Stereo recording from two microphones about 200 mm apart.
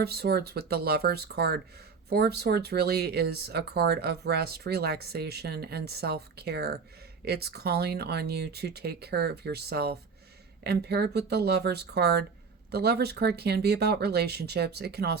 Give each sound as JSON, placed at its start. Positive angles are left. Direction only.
{"t": 0.0, "sound": "speech", "side_deg": -50}